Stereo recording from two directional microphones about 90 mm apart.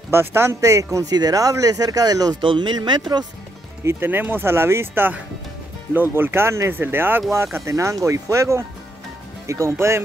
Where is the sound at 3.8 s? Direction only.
25° right (ahead or behind).